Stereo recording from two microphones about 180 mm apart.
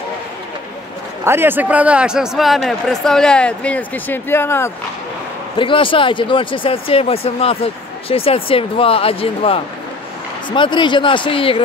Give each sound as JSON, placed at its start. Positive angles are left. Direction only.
{"t": 1.2, "sound": "a man's voice", "side_deg": -15}
{"t": 5.6, "sound": "speech", "side_deg": 30}